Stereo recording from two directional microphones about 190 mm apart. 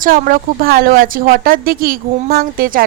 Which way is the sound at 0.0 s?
45° right (ahead or behind).